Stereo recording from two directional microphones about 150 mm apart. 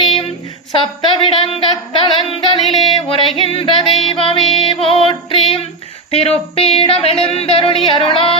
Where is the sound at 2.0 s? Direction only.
35° left (ahead or behind).